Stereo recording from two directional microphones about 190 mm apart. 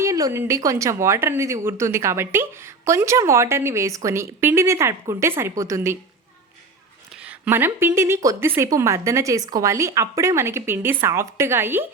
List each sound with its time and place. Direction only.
0.0 s a woman's voice: 15° right (ahead or behind)
7.2 s a woman's voice: 10° right (ahead or behind)